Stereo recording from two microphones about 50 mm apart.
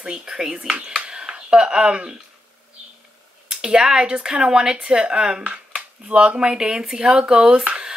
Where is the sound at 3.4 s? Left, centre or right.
Centre.